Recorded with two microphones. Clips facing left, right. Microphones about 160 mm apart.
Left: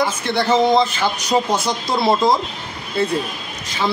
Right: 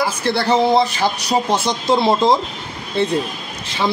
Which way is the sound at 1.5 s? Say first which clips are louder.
Right 3 dB; 20° right (ahead or behind).